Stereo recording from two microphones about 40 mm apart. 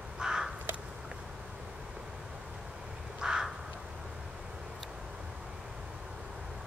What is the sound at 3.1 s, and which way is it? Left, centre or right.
Crow, centre.